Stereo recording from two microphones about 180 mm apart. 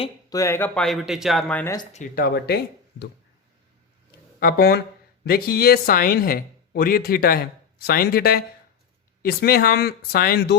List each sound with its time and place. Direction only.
0.3 s speech: 15° left (ahead or behind)
1.9 s speech: 45° left (ahead or behind)
4.4 s speech: 60° left (ahead or behind)